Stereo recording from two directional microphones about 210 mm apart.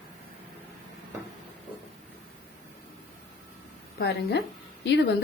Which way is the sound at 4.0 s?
55° left (ahead or behind).